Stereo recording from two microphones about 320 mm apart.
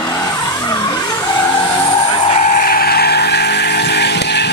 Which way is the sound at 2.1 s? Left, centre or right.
Left.